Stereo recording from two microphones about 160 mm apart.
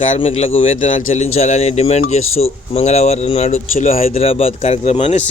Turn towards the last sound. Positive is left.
turn(degrees=45)  # may be behind; listen again after turning